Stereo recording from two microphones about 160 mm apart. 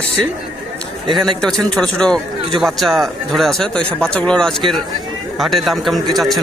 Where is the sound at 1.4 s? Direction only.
5° left (ahead or behind).